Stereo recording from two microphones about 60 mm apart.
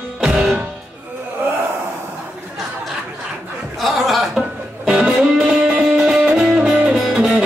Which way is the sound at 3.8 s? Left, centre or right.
Centre.